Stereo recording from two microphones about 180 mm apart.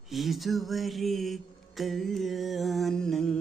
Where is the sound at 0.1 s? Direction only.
Centre (ahead or behind).